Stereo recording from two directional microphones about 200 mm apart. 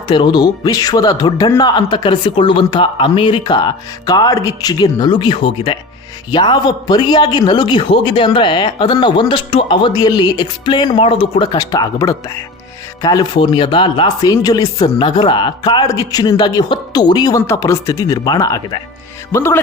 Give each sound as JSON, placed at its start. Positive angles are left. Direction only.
{"t": 0.1, "sound": "a man's voice", "side_deg": 20}